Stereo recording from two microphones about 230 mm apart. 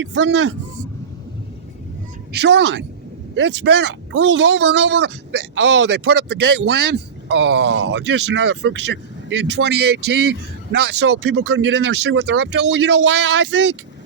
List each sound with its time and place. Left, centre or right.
0.0 s speech: right
2.3 s speech: right